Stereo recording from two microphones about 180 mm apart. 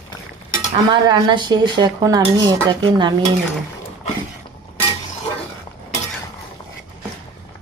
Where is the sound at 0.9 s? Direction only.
25° right (ahead or behind).